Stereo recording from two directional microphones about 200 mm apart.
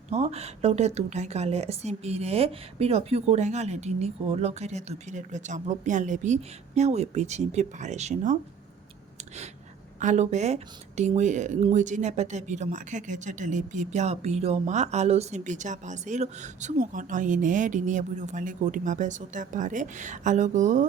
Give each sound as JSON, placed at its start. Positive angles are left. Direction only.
{"t": 0.1, "sound": "speech", "side_deg": -30}
{"t": 10.0, "sound": "speech", "side_deg": -35}